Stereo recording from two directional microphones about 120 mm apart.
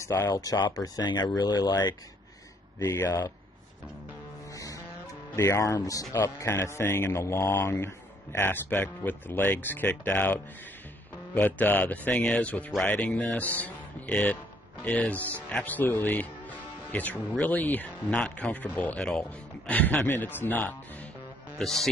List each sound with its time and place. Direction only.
0.0 s speech: 25° left (ahead or behind)
5.3 s speech: 25° left (ahead or behind)
21.5 s a man's voice: 5° left (ahead or behind)